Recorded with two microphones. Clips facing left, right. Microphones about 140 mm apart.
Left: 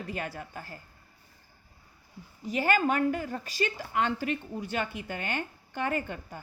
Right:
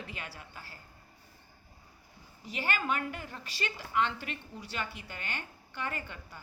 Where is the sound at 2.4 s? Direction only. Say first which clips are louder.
Left 7 dB; 45° left (ahead or behind).